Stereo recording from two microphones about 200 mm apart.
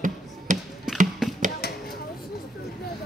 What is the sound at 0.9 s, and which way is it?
Tap, centre (ahead or behind).